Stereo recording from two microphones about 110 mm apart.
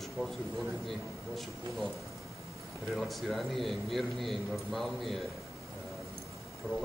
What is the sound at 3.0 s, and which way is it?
A man's voice, centre (ahead or behind).